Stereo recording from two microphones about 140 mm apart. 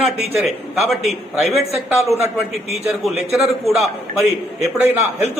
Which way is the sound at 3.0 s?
Centre (ahead or behind).